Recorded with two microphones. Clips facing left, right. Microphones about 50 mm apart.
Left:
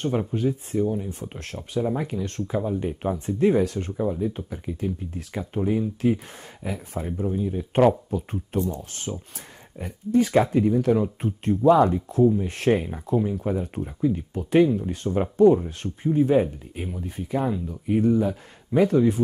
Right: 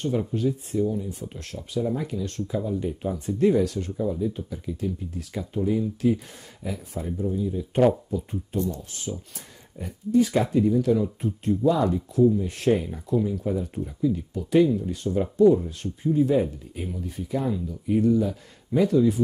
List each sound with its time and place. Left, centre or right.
0.2 s speech: left